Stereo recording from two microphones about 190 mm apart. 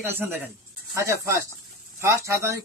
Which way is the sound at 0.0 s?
10° right (ahead or behind).